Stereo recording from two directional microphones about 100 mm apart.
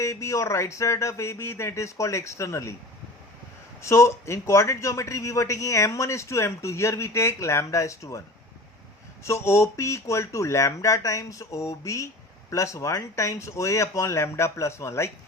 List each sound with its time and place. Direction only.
0.0 s a man's voice: 30° left (ahead or behind)
3.8 s a man's voice: 30° left (ahead or behind)
9.2 s a man's voice: 25° left (ahead or behind)